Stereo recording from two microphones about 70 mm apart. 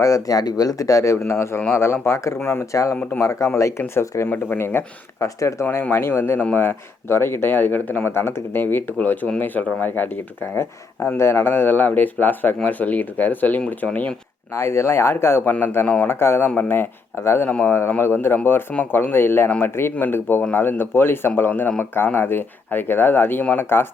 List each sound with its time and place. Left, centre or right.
0.0 s speech: left
1.2 s speech: left
4.3 s speech: left
5.2 s speech: left
5.6 s speech: left
8.1 s speech: left
9.0 s speech: centre
14.5 s speech: left